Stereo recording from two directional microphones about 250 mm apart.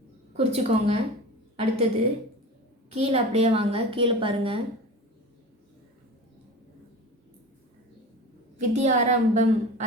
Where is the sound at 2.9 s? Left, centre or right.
Right.